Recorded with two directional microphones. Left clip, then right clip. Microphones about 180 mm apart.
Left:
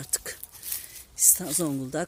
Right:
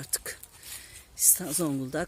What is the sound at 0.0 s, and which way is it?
Speech, centre (ahead or behind).